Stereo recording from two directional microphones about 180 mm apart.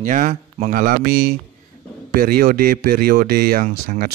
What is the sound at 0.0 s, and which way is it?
Speech, 45° right (ahead or behind).